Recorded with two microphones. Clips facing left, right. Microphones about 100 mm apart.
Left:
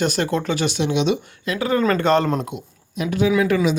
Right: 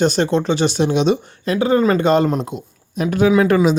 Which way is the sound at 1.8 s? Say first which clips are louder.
Right 3 dB; 15° right (ahead or behind).